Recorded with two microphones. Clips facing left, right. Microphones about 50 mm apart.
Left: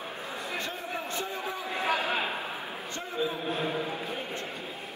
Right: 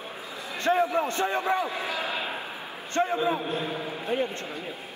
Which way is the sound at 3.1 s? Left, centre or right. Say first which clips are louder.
Right 5 dB; right.